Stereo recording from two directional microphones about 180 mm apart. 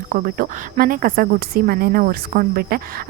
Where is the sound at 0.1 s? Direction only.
55° right (ahead or behind).